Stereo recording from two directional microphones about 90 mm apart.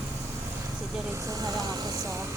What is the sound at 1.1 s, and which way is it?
Speech, 40° right (ahead or behind).